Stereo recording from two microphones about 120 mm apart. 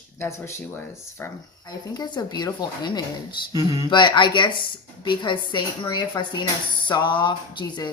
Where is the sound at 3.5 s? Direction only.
30° right (ahead or behind).